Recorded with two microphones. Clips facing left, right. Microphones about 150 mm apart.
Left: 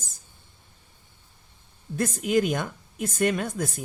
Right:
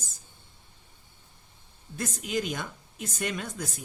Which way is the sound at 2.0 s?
55° left (ahead or behind).